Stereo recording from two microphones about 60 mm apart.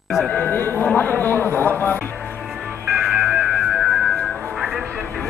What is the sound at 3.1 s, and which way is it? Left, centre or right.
Music, centre.